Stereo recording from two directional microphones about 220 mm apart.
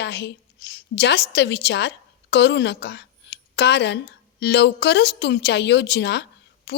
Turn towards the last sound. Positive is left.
turn(degrees=50)  # may be behind; listen again after turning